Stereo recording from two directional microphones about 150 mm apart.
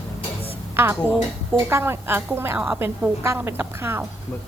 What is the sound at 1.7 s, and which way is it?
A woman's voice, 15° right (ahead or behind).